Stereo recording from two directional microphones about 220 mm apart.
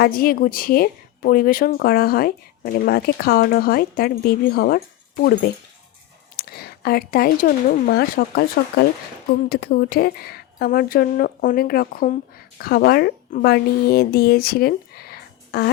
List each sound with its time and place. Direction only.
0.0 s a woman's voice: 40° left (ahead or behind)